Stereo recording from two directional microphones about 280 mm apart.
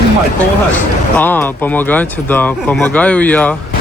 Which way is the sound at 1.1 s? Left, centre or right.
Centre.